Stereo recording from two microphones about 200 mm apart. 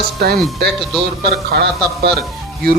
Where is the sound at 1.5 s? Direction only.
55° right (ahead or behind).